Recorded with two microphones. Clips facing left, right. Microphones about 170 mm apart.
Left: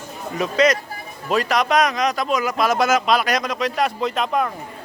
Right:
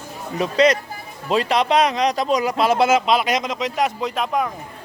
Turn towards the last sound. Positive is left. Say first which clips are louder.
# left 1 dB
turn(degrees=-10)  # may be behind; listen again after turning